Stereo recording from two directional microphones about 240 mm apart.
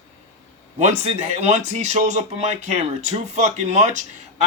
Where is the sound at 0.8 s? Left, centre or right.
Right.